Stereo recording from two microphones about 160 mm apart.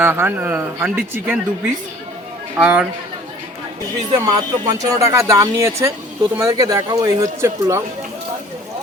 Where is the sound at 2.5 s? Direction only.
5° right (ahead or behind).